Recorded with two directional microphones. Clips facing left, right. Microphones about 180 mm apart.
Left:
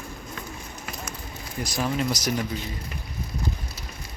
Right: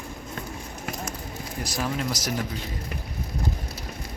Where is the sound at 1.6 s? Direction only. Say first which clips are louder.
Left 3 dB; 5° right (ahead or behind).